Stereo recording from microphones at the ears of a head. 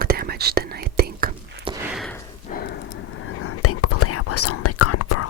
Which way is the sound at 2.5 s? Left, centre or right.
Left.